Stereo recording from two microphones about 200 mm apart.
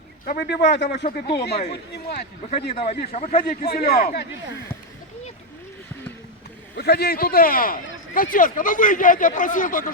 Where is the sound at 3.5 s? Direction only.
50° left (ahead or behind).